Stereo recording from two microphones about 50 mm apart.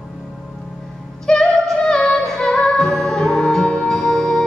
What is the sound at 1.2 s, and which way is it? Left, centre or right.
Music, centre.